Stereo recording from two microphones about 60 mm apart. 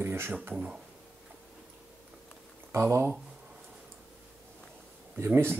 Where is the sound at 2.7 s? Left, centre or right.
Right.